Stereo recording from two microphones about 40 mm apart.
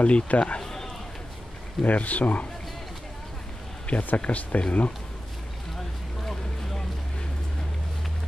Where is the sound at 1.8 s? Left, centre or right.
Left.